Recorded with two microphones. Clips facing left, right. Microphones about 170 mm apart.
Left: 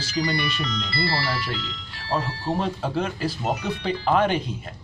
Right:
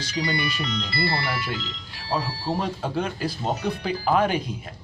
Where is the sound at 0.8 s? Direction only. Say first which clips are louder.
Left 1 dB; 20° right (ahead or behind).